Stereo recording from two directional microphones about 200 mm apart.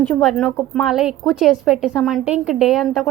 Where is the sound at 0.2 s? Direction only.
Centre (ahead or behind).